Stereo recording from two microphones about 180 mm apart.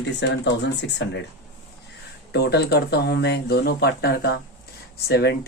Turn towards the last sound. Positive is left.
turn(degrees=65)  # may be behind; listen again after turning